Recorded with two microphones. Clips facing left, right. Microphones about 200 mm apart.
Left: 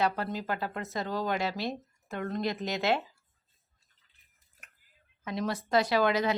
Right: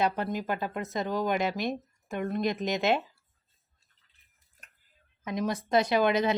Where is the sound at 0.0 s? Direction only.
20° right (ahead or behind).